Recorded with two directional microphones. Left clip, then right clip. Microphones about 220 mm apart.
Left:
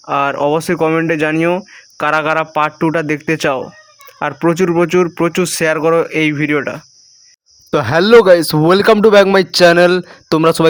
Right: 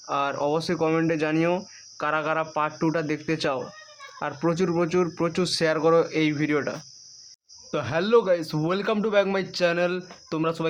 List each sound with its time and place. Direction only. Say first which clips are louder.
0.0 s speech: left 11 dB; 30° left (ahead or behind)
7.7 s speech: left 13 dB; 50° left (ahead or behind)